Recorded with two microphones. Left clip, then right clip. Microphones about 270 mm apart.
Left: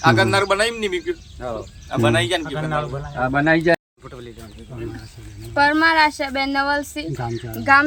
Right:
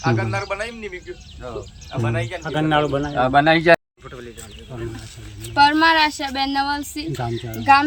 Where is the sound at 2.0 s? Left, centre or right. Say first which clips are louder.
Left 8 dB; left.